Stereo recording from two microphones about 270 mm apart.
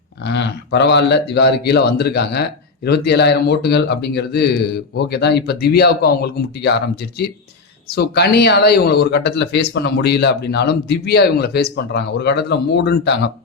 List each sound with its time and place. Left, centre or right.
0.3 s speech: left
7.9 s speech: left